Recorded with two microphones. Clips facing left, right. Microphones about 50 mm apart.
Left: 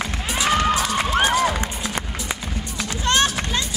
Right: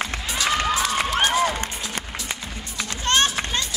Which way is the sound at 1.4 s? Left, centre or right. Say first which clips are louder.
Left 1 dB; centre.